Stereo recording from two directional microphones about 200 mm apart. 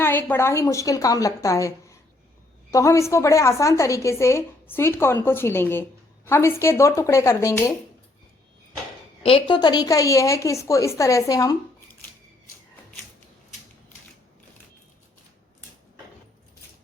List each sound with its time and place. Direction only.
0.0 s a woman's voice: 10° left (ahead or behind)
9.2 s a woman's voice: 25° left (ahead or behind)